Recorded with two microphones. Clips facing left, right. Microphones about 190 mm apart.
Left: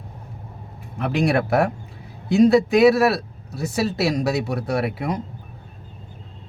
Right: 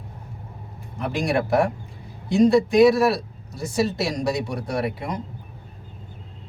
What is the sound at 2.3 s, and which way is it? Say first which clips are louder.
Speech: left 2 dB; 5° left (ahead or behind).